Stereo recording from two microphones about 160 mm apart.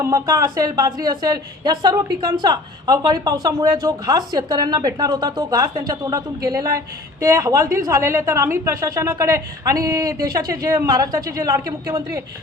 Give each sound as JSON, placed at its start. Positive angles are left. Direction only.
{"t": 0.0, "sound": "speech", "side_deg": -20}